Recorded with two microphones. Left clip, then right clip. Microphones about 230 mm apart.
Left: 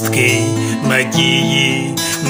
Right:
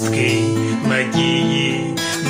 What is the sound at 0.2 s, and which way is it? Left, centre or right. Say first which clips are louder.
Music: left 5 dB; left.